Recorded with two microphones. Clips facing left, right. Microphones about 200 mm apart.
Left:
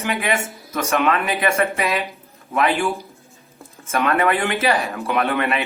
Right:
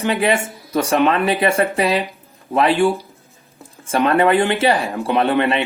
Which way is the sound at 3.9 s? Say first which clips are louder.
Right 4 dB; 30° right (ahead or behind).